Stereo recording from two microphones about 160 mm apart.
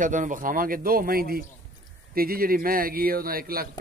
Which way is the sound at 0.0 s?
55° right (ahead or behind).